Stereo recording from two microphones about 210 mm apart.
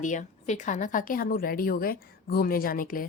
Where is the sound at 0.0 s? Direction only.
35° left (ahead or behind).